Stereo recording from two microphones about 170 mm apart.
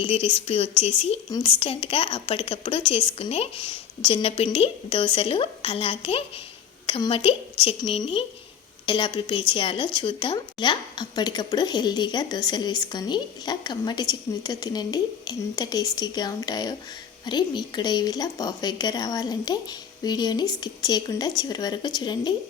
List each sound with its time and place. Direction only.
0.0 s a woman's voice: 35° left (ahead or behind)